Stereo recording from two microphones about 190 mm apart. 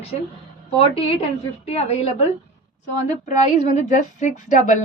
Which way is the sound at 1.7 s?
35° left (ahead or behind).